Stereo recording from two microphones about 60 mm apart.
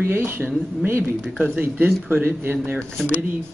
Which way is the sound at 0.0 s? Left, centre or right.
Right.